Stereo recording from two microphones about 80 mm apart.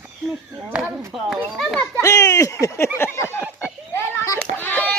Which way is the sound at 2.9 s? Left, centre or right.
Left.